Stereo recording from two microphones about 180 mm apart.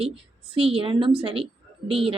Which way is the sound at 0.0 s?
30° right (ahead or behind).